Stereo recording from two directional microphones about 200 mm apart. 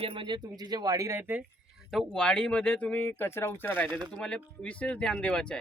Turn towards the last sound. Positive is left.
turn(degrees=5)  # may be behind; listen again after turning